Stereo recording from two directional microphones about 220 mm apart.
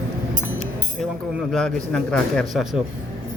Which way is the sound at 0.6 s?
Centre (ahead or behind).